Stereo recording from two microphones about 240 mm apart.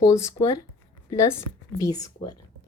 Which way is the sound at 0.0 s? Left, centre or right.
Centre.